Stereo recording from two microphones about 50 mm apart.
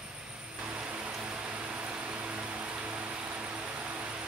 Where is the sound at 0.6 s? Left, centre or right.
Right.